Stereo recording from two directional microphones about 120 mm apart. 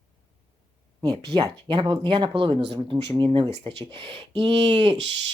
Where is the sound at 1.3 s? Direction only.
40° right (ahead or behind).